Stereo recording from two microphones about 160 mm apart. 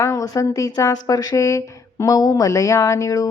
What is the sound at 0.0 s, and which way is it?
A woman's voice, 20° left (ahead or behind).